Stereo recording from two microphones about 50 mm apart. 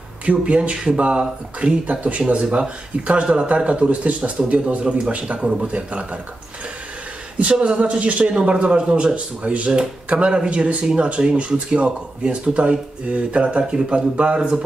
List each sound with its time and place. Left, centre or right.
0.2 s speech: right
7.3 s speech: right